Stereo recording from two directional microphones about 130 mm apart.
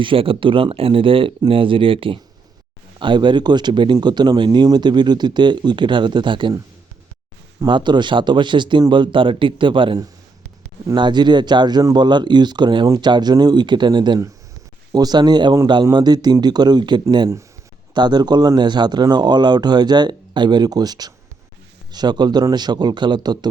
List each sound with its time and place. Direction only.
0.0 s speech: 45° right (ahead or behind)
7.6 s speech: 35° right (ahead or behind)